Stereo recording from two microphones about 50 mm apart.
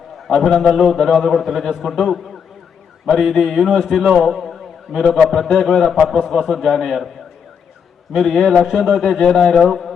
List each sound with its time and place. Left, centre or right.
0.3 s a man's voice: centre
8.1 s a man's voice: centre